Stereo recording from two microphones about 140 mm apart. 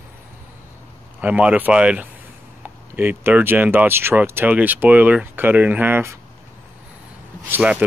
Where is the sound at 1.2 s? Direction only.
10° right (ahead or behind).